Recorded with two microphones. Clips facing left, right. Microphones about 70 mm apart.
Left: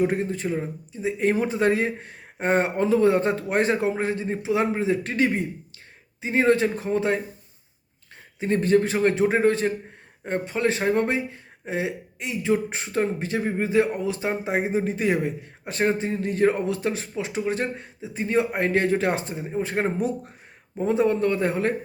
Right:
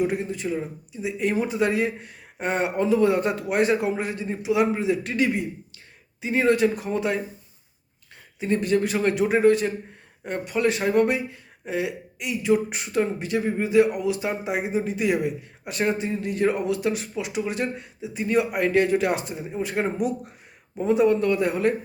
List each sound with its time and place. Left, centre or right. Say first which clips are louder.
0.0 s speech: left 1 dB; left
8.4 s speech: left 2 dB; left